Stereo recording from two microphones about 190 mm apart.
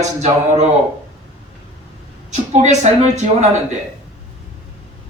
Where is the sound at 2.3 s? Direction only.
40° right (ahead or behind).